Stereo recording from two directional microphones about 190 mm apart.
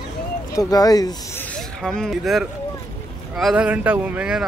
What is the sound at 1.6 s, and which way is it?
Speech, 5° left (ahead or behind).